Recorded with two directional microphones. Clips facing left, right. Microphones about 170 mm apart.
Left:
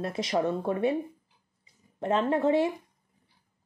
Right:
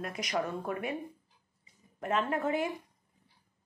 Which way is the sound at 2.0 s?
30° left (ahead or behind).